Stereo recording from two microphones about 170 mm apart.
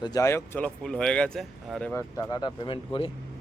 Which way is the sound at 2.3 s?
30° left (ahead or behind).